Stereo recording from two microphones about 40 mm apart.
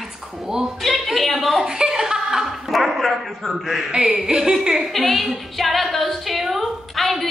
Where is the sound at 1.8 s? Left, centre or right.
Centre.